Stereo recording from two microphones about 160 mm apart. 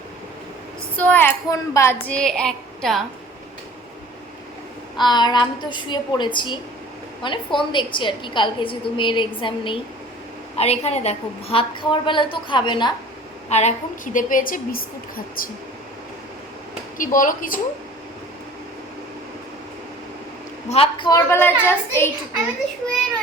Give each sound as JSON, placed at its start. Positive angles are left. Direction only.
{"t": 0.9, "sound": "a woman's voice", "side_deg": 10}
{"t": 4.9, "sound": "a woman's voice", "side_deg": 25}
{"t": 10.6, "sound": "a woman's voice", "side_deg": 40}
{"t": 13.5, "sound": "a woman's voice", "side_deg": 45}
{"t": 17.0, "sound": "a woman's voice", "side_deg": 55}
{"t": 20.7, "sound": "a woman's voice", "side_deg": 35}
{"t": 21.1, "sound": "a woman's voice", "side_deg": 20}